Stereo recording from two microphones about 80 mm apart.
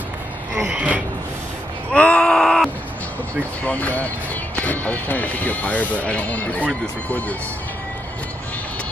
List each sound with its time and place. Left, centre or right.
0.7 s a sound: centre
1.9 s wail: centre
3.3 s speech: centre